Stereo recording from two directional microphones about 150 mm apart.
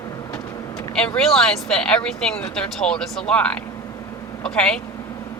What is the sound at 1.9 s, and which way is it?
Speech, 5° left (ahead or behind).